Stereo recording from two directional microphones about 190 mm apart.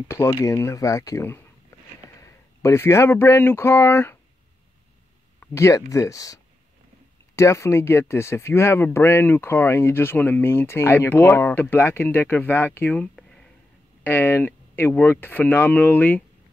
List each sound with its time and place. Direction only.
0.1 s speech: 15° left (ahead or behind)
5.4 s speech: 15° left (ahead or behind)